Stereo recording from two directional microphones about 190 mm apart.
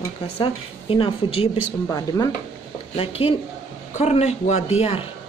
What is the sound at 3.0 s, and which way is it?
Speech, 30° left (ahead or behind).